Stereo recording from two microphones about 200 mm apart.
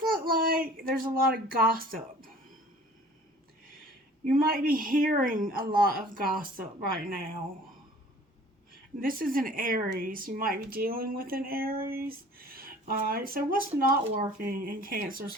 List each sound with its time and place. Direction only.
0.0 s a sound: 45° right (ahead or behind)
4.2 s a woman's voice: 45° right (ahead or behind)
9.0 s a woman's voice: 45° right (ahead or behind)